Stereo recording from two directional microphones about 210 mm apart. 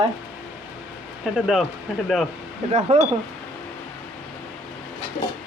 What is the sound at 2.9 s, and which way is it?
Speech, 30° right (ahead or behind).